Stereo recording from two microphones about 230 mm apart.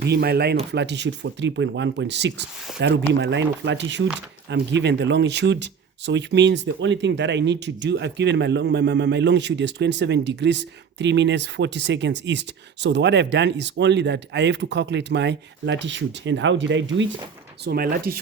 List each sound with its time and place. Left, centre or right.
0.0 s speech: right
17.7 s speech: right